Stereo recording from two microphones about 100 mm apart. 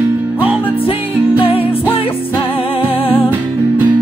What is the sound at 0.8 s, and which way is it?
Music, 65° left (ahead or behind).